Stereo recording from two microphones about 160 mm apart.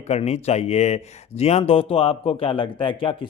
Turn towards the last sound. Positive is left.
turn(degrees=30)  # may be behind; listen again after turning